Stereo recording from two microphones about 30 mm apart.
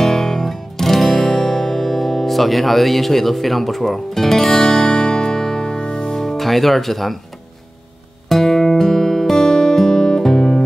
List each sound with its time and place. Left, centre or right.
0.0 s music: centre
1.3 s music: centre
6.1 s speech: centre
8.3 s music: centre
8.6 s music: centre